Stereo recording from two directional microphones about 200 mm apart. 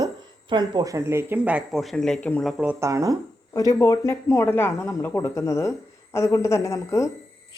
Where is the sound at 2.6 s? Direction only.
10° right (ahead or behind).